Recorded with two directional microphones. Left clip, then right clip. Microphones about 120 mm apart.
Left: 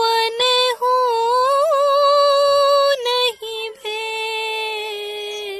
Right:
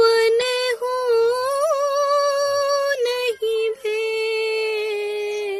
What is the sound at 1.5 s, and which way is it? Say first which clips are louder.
Humming: left 4 dB; 25° left (ahead or behind).